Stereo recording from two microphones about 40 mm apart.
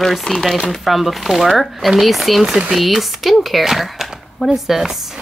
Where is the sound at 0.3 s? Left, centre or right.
Left.